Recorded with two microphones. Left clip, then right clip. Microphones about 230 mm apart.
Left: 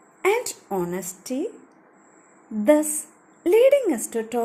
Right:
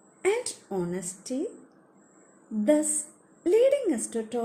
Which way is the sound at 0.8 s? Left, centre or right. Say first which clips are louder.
Left 3 dB; centre.